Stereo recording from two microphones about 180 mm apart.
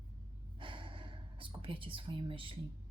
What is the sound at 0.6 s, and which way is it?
Gasp, 30° right (ahead or behind).